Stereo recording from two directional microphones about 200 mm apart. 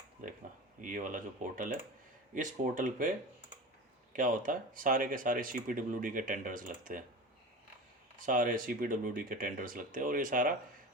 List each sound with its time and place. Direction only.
0.2 s speech: 40° right (ahead or behind)
8.2 s speech: 40° right (ahead or behind)